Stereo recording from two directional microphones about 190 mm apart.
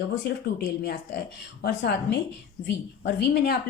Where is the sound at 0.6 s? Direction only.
60° left (ahead or behind).